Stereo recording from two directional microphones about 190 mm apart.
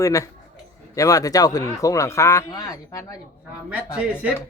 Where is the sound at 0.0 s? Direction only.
15° left (ahead or behind).